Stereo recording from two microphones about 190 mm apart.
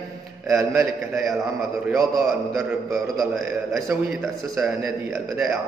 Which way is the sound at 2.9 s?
Centre (ahead or behind).